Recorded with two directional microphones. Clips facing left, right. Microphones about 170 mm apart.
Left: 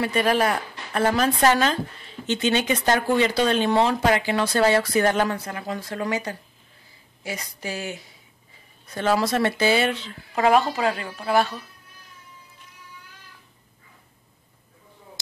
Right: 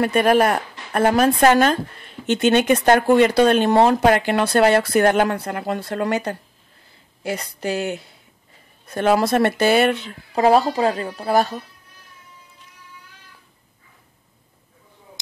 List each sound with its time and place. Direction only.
0.0 s speech: 50° right (ahead or behind)
10.3 s a woman's voice: 35° right (ahead or behind)